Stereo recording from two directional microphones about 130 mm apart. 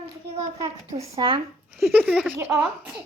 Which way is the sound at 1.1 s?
40° right (ahead or behind).